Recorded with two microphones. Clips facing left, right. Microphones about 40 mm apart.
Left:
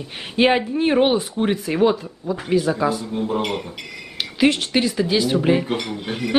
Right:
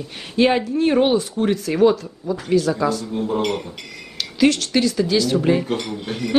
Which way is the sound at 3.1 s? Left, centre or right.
Centre.